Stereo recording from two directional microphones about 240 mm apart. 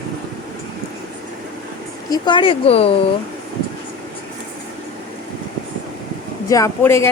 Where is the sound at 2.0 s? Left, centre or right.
Centre.